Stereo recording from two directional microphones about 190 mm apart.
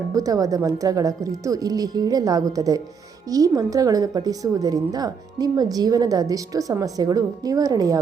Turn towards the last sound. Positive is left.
turn(degrees=-20)  # may be behind; listen again after turning